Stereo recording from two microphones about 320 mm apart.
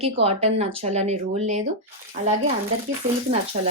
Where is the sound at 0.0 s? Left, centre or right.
Centre.